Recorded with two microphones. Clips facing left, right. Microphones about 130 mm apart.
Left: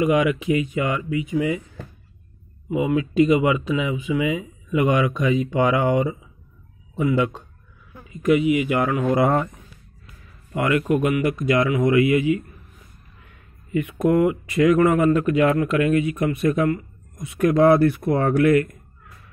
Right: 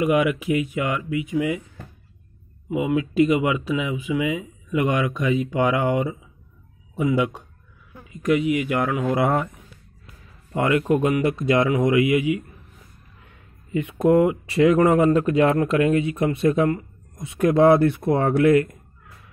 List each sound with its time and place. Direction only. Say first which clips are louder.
0.0 s speech: left 1 dB; 5° right (ahead or behind)
2.7 s speech: left 1 dB; 5° right (ahead or behind)
7.0 s speech: left 1 dB; 10° right (ahead or behind)
8.1 s speech: left 2 dB; 5° left (ahead or behind)
10.5 s speech: right 1 dB; 25° right (ahead or behind)
13.7 s speech: right 1 dB; 25° right (ahead or behind)